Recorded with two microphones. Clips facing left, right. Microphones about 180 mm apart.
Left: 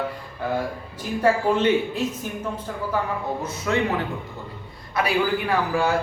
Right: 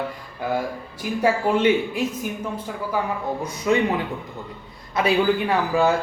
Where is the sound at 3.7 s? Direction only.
15° right (ahead or behind).